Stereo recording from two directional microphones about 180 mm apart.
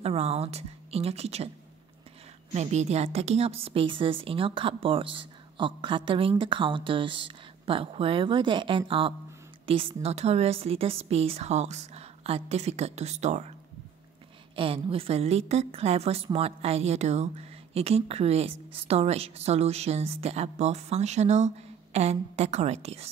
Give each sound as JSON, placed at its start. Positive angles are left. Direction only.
{"t": 0.0, "sound": "a woman's voice", "side_deg": -35}
{"t": 2.5, "sound": "a woman's voice", "side_deg": -40}
{"t": 14.5, "sound": "a woman's voice", "side_deg": -30}